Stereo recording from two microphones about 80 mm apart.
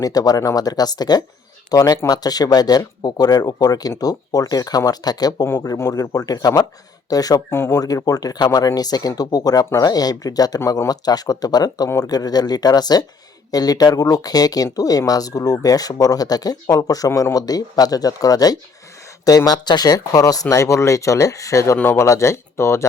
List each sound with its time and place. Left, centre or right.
0.0 s speech: left
5.6 s speech: left
7.5 s speech: left
7.8 s speech: left